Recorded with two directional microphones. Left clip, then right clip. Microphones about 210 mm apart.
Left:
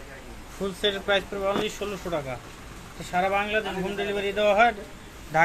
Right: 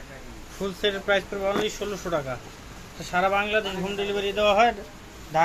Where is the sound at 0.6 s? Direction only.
Centre (ahead or behind); by 3.6 s 20° right (ahead or behind).